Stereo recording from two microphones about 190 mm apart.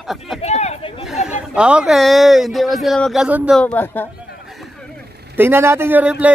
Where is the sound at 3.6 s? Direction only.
10° left (ahead or behind).